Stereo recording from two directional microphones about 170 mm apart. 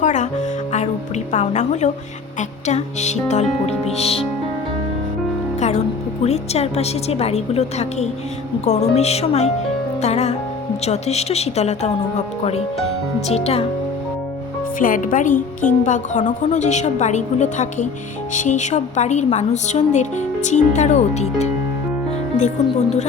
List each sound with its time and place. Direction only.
0.0 s music: 45° left (ahead or behind)
1.3 s a woman's voice: 45° left (ahead or behind)
5.5 s music: 45° left (ahead or behind)
6.2 s a woman's voice: 40° left (ahead or behind)
13.2 s a woman's voice: 35° left (ahead or behind)
14.8 s a woman's voice: 55° left (ahead or behind)